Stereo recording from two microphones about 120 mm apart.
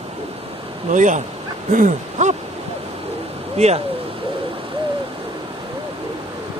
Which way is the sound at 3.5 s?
65° right (ahead or behind).